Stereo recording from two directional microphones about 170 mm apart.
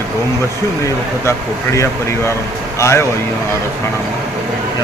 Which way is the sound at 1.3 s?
15° left (ahead or behind).